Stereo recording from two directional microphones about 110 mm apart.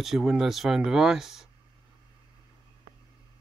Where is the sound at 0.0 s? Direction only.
5° right (ahead or behind).